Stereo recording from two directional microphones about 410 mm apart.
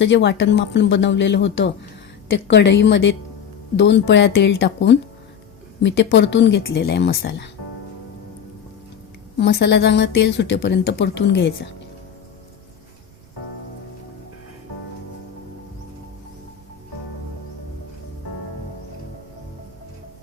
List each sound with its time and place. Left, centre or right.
0.0 s speech: left
9.4 s speech: left